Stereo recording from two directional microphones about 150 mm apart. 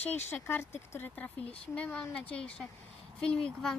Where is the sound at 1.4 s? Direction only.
40° left (ahead or behind).